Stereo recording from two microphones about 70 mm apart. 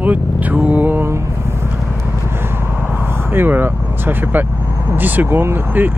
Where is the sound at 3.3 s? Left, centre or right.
Right.